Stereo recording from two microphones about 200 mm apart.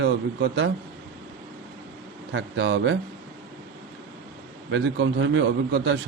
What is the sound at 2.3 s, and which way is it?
Speech, 65° right (ahead or behind).